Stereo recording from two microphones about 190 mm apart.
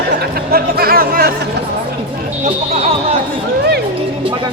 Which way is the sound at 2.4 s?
35° right (ahead or behind).